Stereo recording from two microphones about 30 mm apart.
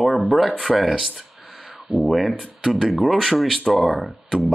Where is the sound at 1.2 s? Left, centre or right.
Right.